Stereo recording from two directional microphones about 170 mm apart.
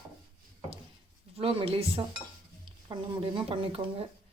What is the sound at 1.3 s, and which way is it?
Speech, 35° right (ahead or behind).